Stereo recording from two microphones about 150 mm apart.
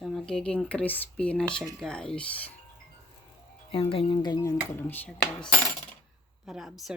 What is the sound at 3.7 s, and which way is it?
Speech, 40° left (ahead or behind).